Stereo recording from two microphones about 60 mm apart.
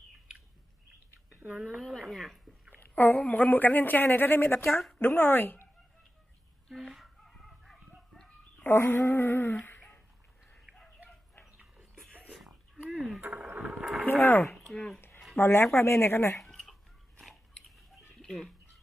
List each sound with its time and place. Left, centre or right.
1.3 s speech: right
1.8 s speech: centre
2.9 s a sound: left
3.3 s speech: left
6.7 s chicken: centre
8.6 s speech: left
9.7 s a sound: left
12.9 s speech: centre
14.0 s speech: left
14.4 s speech: centre
15.3 s speech: left
16.4 s a sound: centre
17.2 s biting: centre
18.1 s a sound: centre